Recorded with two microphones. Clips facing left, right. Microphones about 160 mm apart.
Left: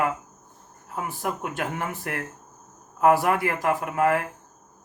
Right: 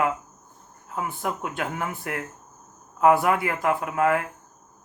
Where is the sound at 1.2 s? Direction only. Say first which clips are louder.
Left 2 dB; 35° left (ahead or behind).